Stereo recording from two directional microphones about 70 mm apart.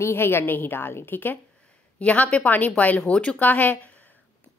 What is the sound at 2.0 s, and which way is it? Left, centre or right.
Speech, centre.